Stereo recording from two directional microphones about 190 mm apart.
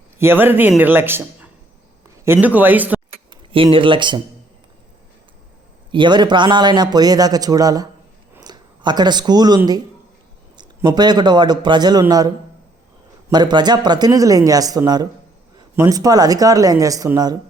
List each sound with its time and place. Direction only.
0.2 s speech: 10° right (ahead or behind)
3.5 s a man's voice: 25° right (ahead or behind)
5.9 s a man's voice: 25° right (ahead or behind)
8.4 s a sound: 20° right (ahead or behind)
10.8 s a man's voice: 20° right (ahead or behind)
13.3 s a man's voice: 20° right (ahead or behind)